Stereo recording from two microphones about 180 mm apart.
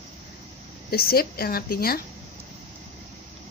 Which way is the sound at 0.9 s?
55° left (ahead or behind).